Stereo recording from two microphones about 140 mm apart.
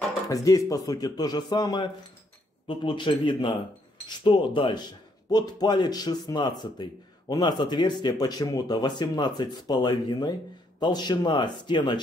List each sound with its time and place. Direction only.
0.3 s speech: 25° left (ahead or behind)